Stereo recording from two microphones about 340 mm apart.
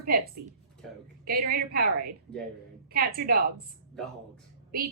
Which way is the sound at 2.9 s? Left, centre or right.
Right.